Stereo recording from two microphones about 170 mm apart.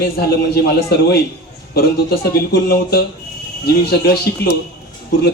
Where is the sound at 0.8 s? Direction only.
70° left (ahead or behind).